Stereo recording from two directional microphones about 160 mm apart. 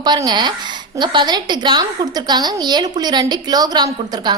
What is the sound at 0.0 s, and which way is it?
A woman's voice, 25° right (ahead or behind).